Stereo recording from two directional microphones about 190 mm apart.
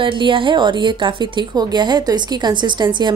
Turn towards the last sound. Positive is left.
turn(degrees=-25)  # may be behind; listen again after turning